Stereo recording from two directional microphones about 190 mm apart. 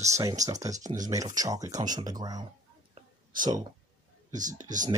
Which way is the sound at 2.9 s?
20° right (ahead or behind).